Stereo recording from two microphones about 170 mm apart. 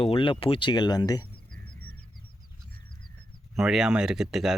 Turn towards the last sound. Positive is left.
turn(degrees=-5)  # may be behind; listen again after turning